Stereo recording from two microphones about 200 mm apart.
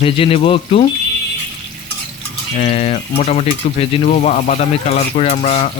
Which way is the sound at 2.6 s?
35° left (ahead or behind).